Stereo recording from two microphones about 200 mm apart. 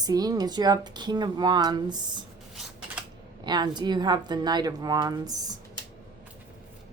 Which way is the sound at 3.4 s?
20° right (ahead or behind).